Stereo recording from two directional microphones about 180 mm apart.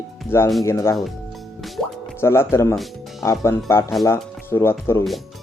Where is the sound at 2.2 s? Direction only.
15° left (ahead or behind).